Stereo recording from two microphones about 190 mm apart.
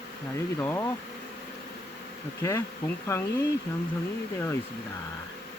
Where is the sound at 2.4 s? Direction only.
15° left (ahead or behind).